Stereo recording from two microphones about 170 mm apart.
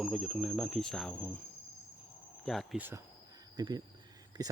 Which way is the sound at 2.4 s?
Centre (ahead or behind).